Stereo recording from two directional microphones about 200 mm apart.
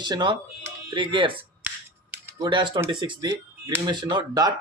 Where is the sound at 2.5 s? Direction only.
25° right (ahead or behind).